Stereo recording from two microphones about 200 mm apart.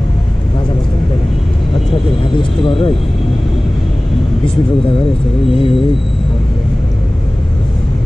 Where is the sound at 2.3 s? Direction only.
25° left (ahead or behind).